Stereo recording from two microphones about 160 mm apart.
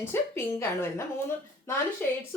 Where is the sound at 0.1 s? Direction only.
15° left (ahead or behind).